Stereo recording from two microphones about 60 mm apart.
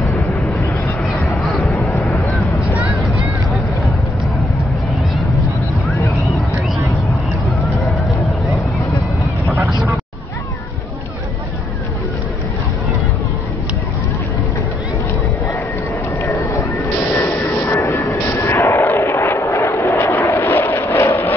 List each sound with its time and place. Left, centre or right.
1.2 s a sound: centre
1.8 s vehicle: centre
9.5 s vehicle: right
16.2 s clip-clop: left
17.4 s vehicle: left
20.4 s a sound: left